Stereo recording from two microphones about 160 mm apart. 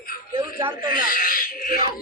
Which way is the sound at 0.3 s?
30° right (ahead or behind).